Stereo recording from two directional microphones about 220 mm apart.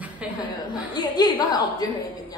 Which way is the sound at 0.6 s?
20° left (ahead or behind).